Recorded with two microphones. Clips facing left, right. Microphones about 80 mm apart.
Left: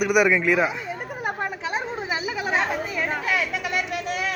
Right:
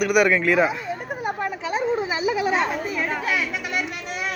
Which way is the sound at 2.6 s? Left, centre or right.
Centre.